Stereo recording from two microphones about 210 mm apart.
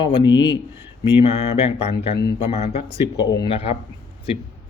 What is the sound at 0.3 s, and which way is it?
Speech, 55° left (ahead or behind).